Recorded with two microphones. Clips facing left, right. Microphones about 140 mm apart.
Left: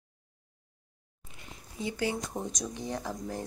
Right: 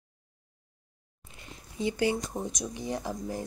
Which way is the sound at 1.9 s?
15° right (ahead or behind).